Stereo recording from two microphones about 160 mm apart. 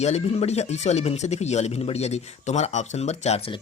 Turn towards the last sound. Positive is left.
turn(degrees=40)  # may be behind; listen again after turning